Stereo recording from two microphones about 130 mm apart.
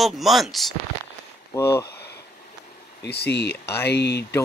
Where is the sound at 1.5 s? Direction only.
20° left (ahead or behind).